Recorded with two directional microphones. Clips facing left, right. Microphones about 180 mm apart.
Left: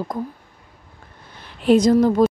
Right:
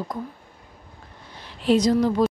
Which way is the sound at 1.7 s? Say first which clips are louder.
Left 5 dB; 50° left (ahead or behind).